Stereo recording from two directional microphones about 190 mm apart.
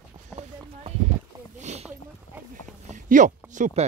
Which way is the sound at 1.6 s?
35° right (ahead or behind).